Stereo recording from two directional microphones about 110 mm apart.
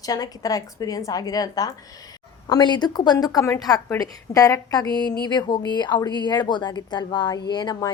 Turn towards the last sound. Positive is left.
turn(degrees=40)  # may be behind; listen again after turning